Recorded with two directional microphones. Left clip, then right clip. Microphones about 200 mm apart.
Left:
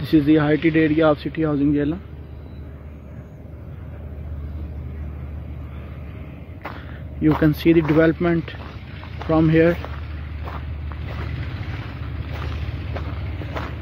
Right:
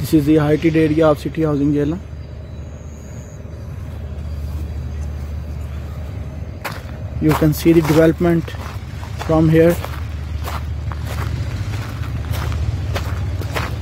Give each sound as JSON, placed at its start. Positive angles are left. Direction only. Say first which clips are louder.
{"t": 0.0, "sound": "speech", "louder": "right 2 dB", "side_deg": -10}
{"t": 7.2, "sound": "speech", "louder": "right 2 dB", "side_deg": -10}
{"t": 12.9, "sound": "walk", "louder": "right 7 dB", "side_deg": -15}